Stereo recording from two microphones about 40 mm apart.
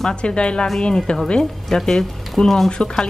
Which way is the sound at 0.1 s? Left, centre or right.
Left.